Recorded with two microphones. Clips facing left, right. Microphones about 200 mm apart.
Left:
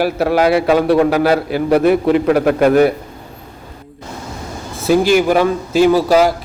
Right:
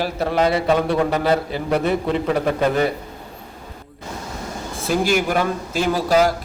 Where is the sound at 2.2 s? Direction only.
75° left (ahead or behind).